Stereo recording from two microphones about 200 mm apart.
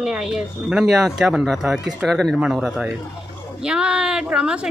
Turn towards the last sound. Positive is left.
turn(degrees=-5)  # may be behind; listen again after turning